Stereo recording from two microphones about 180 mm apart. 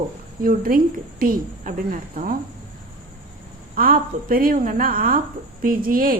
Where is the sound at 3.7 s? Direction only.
50° right (ahead or behind).